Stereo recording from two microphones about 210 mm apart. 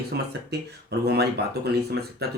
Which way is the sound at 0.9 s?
50° right (ahead or behind).